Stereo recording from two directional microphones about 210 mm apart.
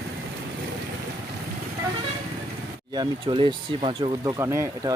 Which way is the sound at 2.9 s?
20° right (ahead or behind).